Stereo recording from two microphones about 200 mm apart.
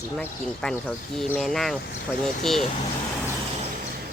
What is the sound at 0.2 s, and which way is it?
Speech, 5° left (ahead or behind).